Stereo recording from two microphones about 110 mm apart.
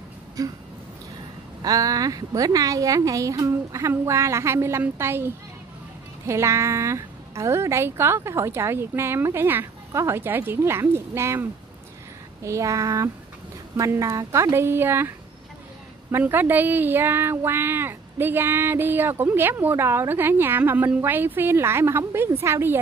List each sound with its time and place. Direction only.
0.4 s a woman's voice: 35° right (ahead or behind)
1.6 s a woman's voice: 35° right (ahead or behind)
12.4 s speech: 30° right (ahead or behind)